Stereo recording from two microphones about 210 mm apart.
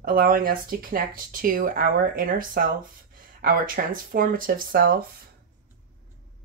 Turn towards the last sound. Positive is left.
turn(degrees=-45)  # may be behind; listen again after turning